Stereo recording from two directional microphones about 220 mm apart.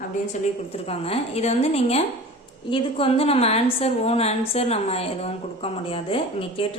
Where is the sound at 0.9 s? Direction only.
30° left (ahead or behind).